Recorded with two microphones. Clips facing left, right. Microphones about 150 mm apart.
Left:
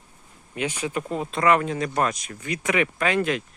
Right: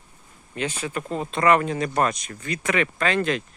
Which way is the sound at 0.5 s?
10° left (ahead or behind).